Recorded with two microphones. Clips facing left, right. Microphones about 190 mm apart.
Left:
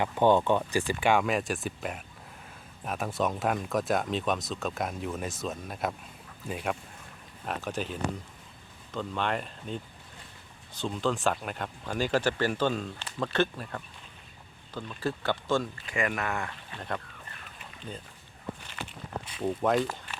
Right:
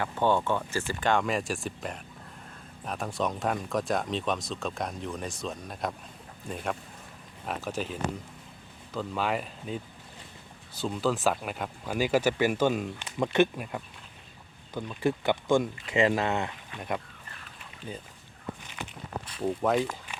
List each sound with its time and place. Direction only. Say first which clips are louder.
0.0 s speech: left 3 dB; 15° left (ahead or behind); by 17.0 s 15° right (ahead or behind)
19.4 s speech: even; centre (ahead or behind)